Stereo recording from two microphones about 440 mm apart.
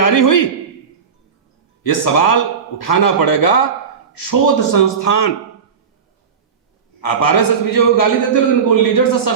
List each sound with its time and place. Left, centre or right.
0.0 s a man's voice: left
1.8 s a man's voice: left
7.0 s a man's voice: left